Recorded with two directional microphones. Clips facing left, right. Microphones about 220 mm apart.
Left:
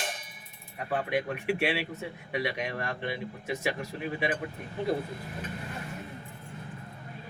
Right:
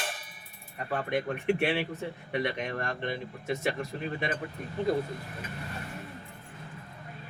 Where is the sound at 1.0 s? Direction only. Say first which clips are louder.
Even; 10° left (ahead or behind).